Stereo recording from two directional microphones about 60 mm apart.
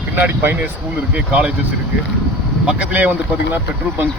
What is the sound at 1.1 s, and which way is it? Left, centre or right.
Speech, right.